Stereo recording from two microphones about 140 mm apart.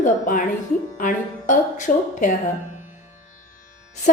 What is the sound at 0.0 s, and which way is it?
A woman's voice, 70° left (ahead or behind).